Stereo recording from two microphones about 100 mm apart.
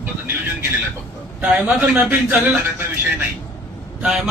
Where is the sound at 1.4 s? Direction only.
10° right (ahead or behind).